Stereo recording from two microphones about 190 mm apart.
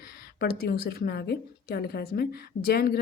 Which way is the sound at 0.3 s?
55° left (ahead or behind).